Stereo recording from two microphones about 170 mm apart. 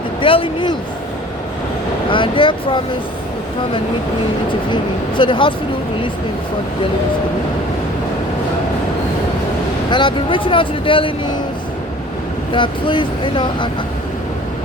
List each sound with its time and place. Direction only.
0.2 s speech: 30° left (ahead or behind)
2.0 s speech: 30° left (ahead or behind)
4.7 s speech: 30° left (ahead or behind)
9.9 s speech: 30° left (ahead or behind)
12.5 s speech: 30° left (ahead or behind)